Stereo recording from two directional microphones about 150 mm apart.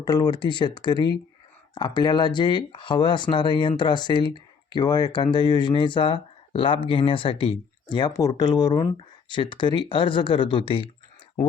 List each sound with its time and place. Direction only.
0.0 s speech: 25° left (ahead or behind)